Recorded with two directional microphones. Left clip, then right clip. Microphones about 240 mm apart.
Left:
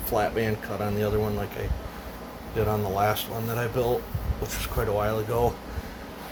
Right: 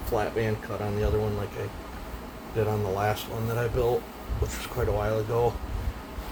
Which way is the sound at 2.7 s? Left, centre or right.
Left.